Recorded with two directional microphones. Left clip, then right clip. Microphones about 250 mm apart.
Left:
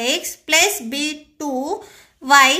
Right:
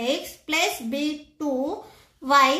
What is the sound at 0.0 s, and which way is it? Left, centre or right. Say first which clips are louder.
A woman's voice: left 5 dB; left.